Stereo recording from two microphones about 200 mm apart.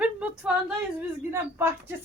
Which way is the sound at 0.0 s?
5° right (ahead or behind).